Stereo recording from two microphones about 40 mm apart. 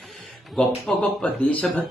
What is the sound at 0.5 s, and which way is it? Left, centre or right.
Speech, centre.